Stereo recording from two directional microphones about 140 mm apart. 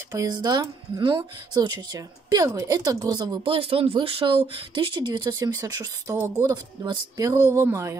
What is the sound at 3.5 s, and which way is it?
Speech, 45° right (ahead or behind).